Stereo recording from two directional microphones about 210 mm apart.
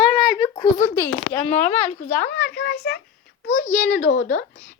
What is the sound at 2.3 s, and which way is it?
A child's voice, 55° left (ahead or behind).